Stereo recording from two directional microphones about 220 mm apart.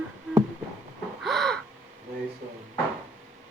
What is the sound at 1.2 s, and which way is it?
Gasp, centre (ahead or behind).